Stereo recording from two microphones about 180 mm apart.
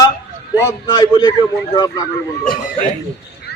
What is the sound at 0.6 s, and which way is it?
A man's voice, 25° left (ahead or behind).